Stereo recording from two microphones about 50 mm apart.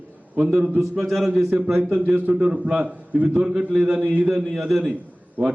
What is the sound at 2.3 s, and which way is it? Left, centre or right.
A man's voice, right.